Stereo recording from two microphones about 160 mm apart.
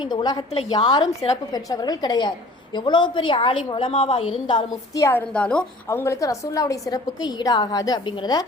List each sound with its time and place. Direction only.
0.0 s a woman's voice: 25° left (ahead or behind)